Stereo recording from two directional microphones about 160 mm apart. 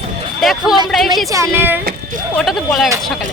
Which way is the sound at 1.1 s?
20° right (ahead or behind).